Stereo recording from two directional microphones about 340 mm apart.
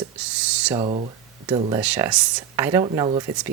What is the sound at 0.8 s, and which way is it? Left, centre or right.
Speech, centre.